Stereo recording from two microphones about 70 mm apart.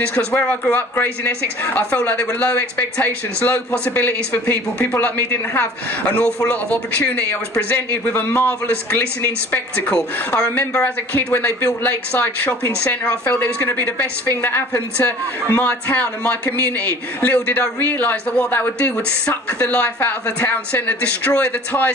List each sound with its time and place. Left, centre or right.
0.0 s speech: centre